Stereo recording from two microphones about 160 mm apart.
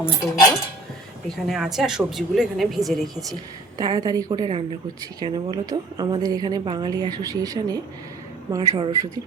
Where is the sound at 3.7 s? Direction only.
25° right (ahead or behind).